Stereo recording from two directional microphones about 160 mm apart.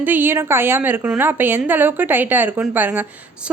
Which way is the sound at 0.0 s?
10° right (ahead or behind).